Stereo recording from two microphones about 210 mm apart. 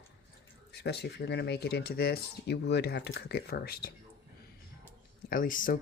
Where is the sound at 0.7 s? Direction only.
50° left (ahead or behind).